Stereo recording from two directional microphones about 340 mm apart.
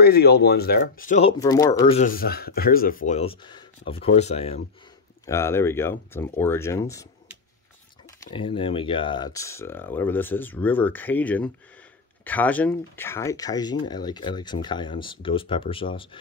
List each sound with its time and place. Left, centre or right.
0.0 s speech: left
5.2 s speech: centre
8.3 s speech: centre